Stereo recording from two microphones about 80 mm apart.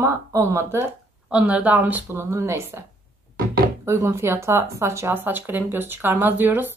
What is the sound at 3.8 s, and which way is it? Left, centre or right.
Speech, right.